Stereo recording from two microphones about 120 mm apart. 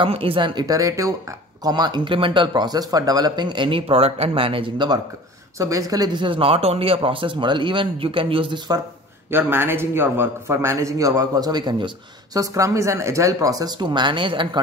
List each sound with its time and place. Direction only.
0.0 s speech: 50° right (ahead or behind)
0.7 s a man's voice: 30° right (ahead or behind)
5.6 s speech: 25° right (ahead or behind); by 8.5 s 45° right (ahead or behind)
9.3 s a man's voice: 20° right (ahead or behind); by 14.6 s 45° right (ahead or behind)